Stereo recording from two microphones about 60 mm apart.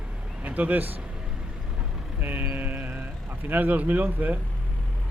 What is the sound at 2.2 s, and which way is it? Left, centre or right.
Speech, right.